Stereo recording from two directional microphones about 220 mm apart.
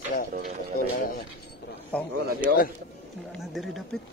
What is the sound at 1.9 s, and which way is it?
Speech, 5° left (ahead or behind).